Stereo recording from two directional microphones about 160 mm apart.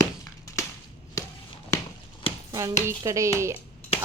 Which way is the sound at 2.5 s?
20° right (ahead or behind).